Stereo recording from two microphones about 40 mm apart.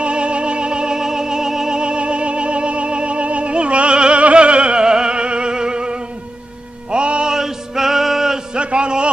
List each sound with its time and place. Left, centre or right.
0.0 s music: right
7.3 s male singing: centre
8.5 s a sound: right